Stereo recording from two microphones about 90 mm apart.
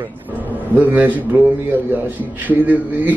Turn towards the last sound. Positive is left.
turn(degrees=-20)  # may be behind; listen again after turning